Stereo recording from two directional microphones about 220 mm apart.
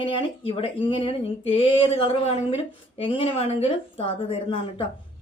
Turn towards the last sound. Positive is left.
turn(degrees=25)  # may be behind; listen again after turning